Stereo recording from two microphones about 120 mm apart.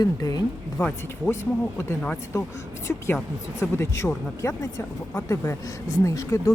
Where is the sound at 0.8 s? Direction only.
10° left (ahead or behind).